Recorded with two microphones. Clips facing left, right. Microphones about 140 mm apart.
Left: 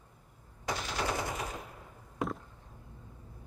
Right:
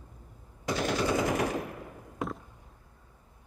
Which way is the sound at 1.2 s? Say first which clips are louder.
Right 9 dB; 85° right.